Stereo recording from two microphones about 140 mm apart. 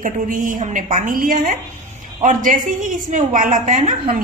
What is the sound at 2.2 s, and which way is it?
A woman's voice, 70° right (ahead or behind).